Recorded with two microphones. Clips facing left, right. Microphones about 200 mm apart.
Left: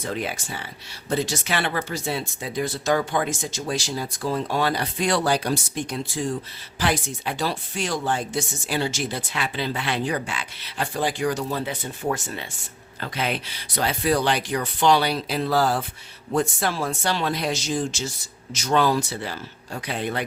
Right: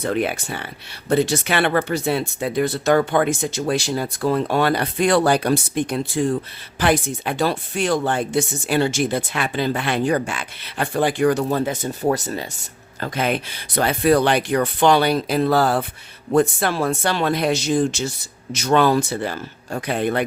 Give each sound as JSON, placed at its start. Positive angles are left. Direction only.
{"t": 0.0, "sound": "speech", "side_deg": -60}
{"t": 13.0, "sound": "speech", "side_deg": -50}